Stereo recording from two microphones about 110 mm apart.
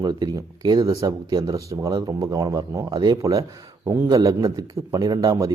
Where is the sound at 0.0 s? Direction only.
40° right (ahead or behind).